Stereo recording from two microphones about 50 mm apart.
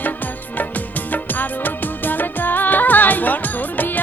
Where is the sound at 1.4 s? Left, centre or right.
Left.